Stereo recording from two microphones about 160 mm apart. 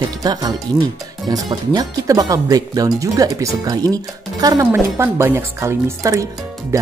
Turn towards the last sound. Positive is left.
turn(degrees=-20)  # may be behind; listen again after turning